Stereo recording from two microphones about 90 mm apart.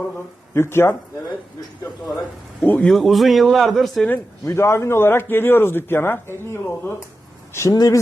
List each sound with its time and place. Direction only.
0.5 s speech: 30° left (ahead or behind)
2.6 s speech: 15° left (ahead or behind)
2.9 s a man's voice: centre (ahead or behind)
4.4 s speech: 30° left (ahead or behind)